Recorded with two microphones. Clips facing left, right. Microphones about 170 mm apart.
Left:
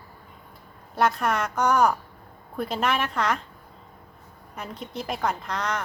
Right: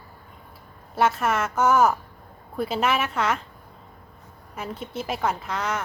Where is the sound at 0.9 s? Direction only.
5° right (ahead or behind).